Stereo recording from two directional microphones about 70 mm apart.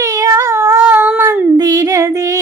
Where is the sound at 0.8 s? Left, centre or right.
Right.